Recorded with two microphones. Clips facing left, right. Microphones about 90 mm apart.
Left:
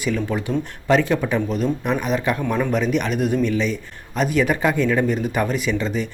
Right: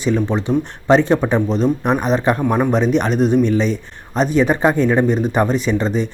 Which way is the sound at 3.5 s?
35° right (ahead or behind).